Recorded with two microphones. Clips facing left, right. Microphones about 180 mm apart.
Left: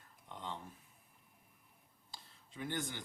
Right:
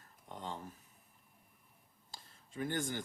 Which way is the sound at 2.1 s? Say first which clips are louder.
Right 5 dB; 45° right (ahead or behind).